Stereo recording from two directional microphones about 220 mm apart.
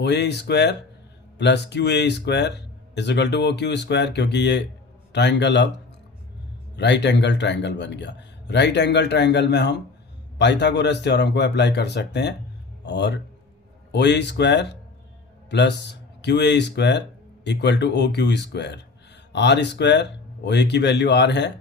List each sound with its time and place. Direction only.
0.0 s speech: 50° left (ahead or behind)
6.7 s a man's voice: 50° left (ahead or behind)